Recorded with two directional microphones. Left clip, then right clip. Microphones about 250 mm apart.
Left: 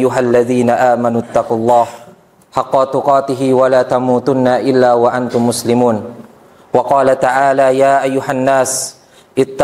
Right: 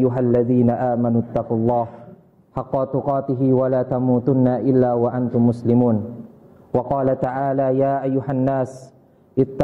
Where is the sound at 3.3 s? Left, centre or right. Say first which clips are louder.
Left 8 dB; centre.